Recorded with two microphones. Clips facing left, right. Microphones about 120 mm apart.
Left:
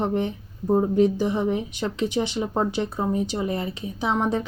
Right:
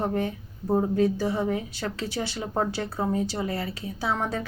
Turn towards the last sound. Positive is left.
turn(degrees=20)  # may be behind; listen again after turning